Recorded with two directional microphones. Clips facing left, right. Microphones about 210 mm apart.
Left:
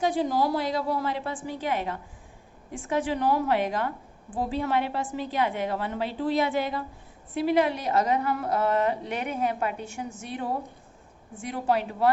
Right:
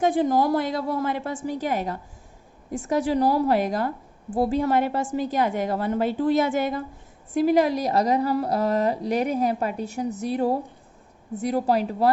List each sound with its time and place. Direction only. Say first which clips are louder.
0.0 s a woman's voice: right 4 dB; 50° right (ahead or behind)